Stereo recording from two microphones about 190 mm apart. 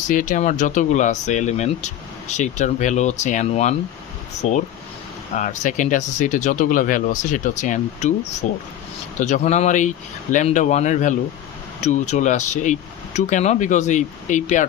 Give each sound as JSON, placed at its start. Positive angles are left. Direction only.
{"t": 0.1, "sound": "speech", "side_deg": 45}